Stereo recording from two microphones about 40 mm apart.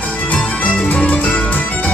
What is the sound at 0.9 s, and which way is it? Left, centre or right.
Music, left.